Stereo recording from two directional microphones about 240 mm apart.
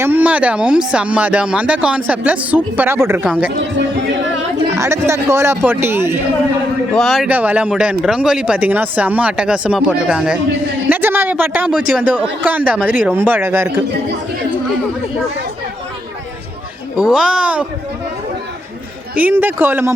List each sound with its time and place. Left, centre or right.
0.0 s speech: centre
3.5 s speech: right
4.8 s a man's voice: centre
6.9 s a man's voice: centre
17.0 s speech: centre
19.1 s a man's voice: centre